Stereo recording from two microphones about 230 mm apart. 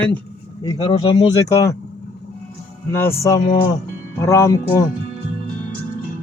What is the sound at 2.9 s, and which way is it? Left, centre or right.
Speech, centre.